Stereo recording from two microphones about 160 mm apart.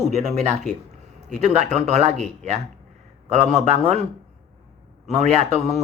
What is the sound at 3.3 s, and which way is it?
Speech, 45° right (ahead or behind).